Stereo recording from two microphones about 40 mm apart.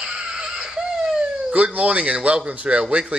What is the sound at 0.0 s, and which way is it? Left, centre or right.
A man's voice, right.